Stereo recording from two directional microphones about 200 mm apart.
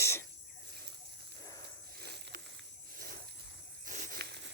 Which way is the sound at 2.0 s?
55° right (ahead or behind).